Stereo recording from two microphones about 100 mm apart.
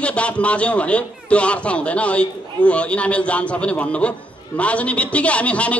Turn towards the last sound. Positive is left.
turn(degrees=15)  # may be behind; listen again after turning